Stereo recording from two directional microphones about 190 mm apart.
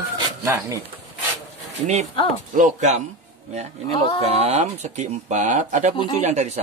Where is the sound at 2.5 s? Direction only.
40° right (ahead or behind).